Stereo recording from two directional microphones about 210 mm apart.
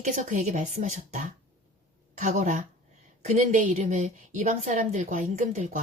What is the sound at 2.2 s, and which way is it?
A woman's voice, 35° right (ahead or behind).